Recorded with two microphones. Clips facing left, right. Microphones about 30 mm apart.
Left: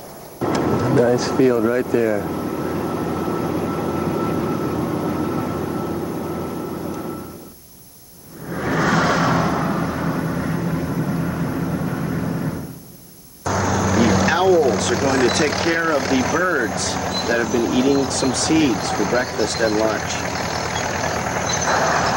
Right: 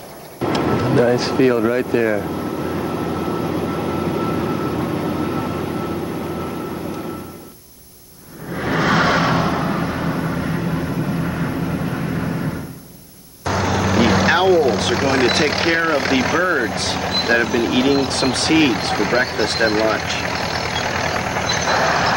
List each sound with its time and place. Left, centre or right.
0.4 s vehicle: right
1.7 s speech: right
2.1 s vehicle: centre
8.5 s a sound: right
13.4 s speech: right